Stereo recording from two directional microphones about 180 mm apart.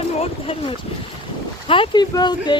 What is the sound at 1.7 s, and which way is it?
Speech, 25° left (ahead or behind).